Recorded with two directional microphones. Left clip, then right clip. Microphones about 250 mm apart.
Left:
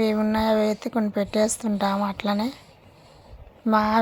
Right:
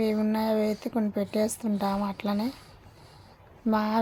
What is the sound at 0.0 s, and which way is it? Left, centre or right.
Speech, centre.